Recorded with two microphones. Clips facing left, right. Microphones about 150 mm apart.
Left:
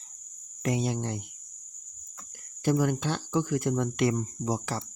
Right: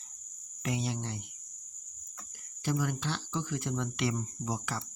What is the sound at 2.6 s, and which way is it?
Speech, 50° left (ahead or behind).